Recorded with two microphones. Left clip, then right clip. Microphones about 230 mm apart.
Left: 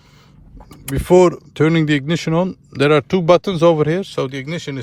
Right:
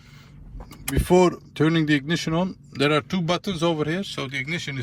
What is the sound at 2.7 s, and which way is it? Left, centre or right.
Speech, left.